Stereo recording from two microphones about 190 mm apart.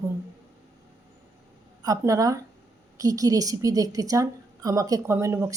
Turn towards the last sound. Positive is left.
turn(degrees=-15)  # may be behind; listen again after turning